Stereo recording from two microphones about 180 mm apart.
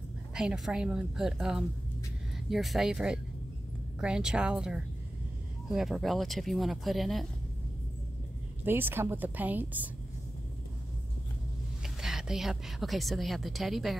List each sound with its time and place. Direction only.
0.3 s speech: 5° right (ahead or behind)
8.6 s speech: 10° right (ahead or behind)
11.8 s a woman's voice: centre (ahead or behind)